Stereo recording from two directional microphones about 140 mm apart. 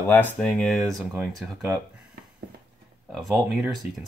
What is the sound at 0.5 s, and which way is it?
Speech, centre (ahead or behind).